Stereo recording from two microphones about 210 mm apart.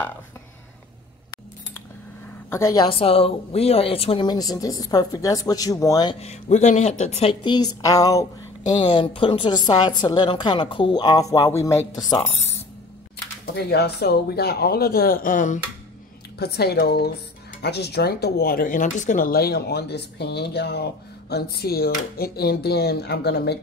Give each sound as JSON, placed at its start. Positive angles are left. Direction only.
{"t": 2.5, "sound": "speech", "side_deg": 15}
{"t": 6.1, "sound": "a woman's voice", "side_deg": 30}
{"t": 13.7, "sound": "speech", "side_deg": 50}
{"t": 16.3, "sound": "speech", "side_deg": 50}